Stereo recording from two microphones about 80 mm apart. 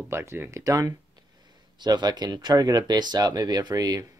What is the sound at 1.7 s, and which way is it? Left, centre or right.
Speech, right.